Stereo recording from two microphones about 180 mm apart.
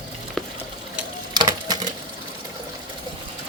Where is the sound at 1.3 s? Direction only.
20° right (ahead or behind).